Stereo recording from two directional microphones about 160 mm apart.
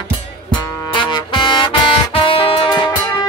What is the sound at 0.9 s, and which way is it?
Music, 30° left (ahead or behind).